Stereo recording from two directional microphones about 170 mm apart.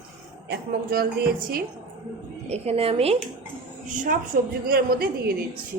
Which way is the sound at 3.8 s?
50° right (ahead or behind).